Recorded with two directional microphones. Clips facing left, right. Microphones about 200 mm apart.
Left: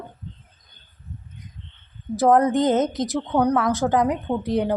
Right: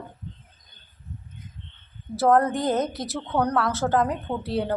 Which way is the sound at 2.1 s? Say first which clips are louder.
Left 3 dB; 20° left (ahead or behind).